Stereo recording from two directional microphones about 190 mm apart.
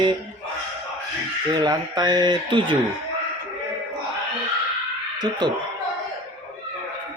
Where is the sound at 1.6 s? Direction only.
20° right (ahead or behind).